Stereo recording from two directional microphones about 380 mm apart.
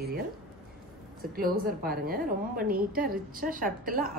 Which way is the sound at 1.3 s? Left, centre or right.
Right.